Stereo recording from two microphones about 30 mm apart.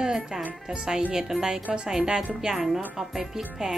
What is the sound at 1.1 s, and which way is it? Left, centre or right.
A woman's voice, centre.